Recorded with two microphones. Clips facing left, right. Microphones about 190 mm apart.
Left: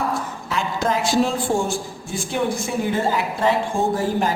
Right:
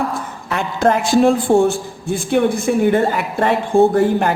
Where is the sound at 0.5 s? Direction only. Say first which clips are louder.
Right 6 dB; 60° right (ahead or behind).